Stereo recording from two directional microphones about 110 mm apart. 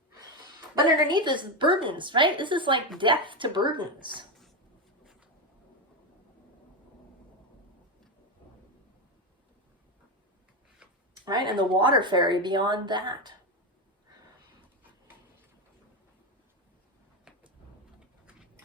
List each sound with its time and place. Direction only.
0.9 s speech: 40° right (ahead or behind)
11.3 s speech: 40° right (ahead or behind)